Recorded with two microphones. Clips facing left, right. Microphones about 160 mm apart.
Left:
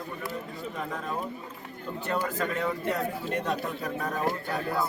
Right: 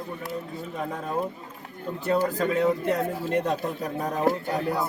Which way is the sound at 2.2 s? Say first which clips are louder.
Right 6 dB; 35° right (ahead or behind).